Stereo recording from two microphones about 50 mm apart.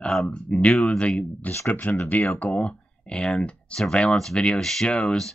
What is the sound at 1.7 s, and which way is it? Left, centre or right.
Speech, left.